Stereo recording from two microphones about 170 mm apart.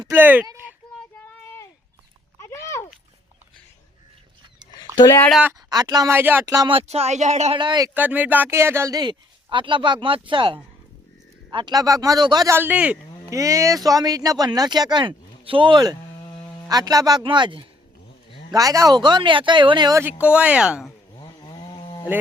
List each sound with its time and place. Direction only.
0.1 s speech: 10° right (ahead or behind)
0.4 s a sound: 10° right (ahead or behind)
1.1 s child singing: 15° left (ahead or behind)
2.4 s a sound: 15° left (ahead or behind)
4.9 s speech: 20° left (ahead or behind)
5.6 s speech: 25° right (ahead or behind)
6.5 s speech: 25° right (ahead or behind); by 7.6 s 40° right (ahead or behind)
7.6 s speech: 25° right (ahead or behind)
7.9 s speech: 10° right (ahead or behind)
13.3 s speech: 20° right (ahead or behind)
20.2 s speech: 5° right (ahead or behind)
21.2 s chainsaw: 25° left (ahead or behind)